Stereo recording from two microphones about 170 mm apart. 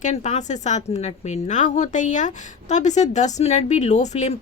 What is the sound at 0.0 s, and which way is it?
A woman's voice, 40° left (ahead or behind).